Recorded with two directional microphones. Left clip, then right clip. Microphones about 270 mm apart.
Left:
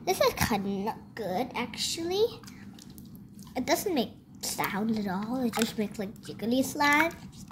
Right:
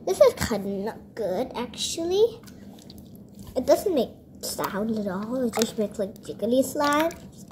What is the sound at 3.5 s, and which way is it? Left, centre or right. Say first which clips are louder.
A woman's voice: right 7 dB; centre.